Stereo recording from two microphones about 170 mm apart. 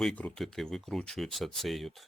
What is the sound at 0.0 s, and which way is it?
Speech, 5° left (ahead or behind).